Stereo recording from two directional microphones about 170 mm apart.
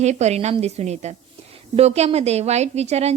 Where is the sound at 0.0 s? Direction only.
40° right (ahead or behind).